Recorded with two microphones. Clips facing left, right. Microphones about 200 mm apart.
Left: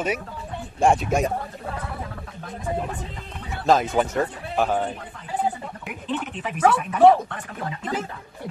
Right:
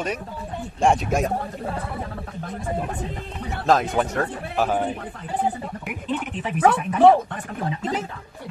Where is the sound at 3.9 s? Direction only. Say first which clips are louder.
Left 1 dB; centre (ahead or behind).